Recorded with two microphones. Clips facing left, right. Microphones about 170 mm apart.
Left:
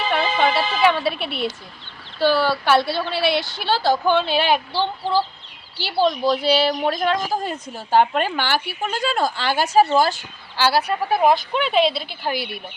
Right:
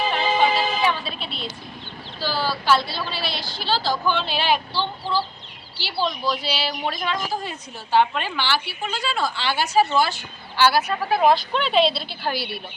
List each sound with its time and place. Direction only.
0.1 s music: 65° left (ahead or behind)
2.1 s a woman's voice: 65° left (ahead or behind); by 10.9 s 35° left (ahead or behind)
11.5 s a woman's voice: 5° left (ahead or behind)